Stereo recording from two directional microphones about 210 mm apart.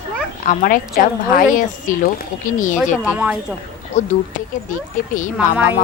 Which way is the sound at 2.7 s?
5° right (ahead or behind).